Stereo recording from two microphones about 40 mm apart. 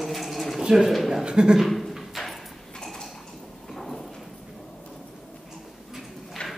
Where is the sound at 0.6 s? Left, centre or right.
Centre.